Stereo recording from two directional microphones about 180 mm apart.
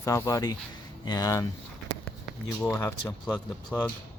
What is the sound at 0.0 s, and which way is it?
Speech, 20° left (ahead or behind).